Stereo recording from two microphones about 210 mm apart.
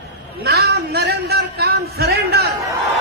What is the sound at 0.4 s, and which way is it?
A man's voice, 50° right (ahead or behind).